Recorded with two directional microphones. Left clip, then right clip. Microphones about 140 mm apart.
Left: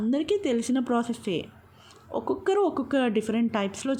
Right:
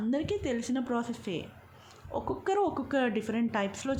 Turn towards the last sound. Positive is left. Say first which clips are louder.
# left 3 dB
turn(degrees=25)  # may be behind; listen again after turning